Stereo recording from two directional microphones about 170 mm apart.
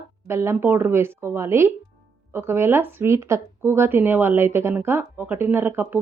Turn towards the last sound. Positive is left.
turn(degrees=-10)  # may be behind; listen again after turning